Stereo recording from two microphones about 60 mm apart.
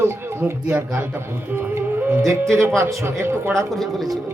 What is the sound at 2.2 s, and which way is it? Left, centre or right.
Speech, right.